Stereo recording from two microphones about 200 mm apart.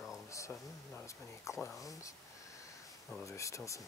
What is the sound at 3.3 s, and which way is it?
Speech, 15° left (ahead or behind).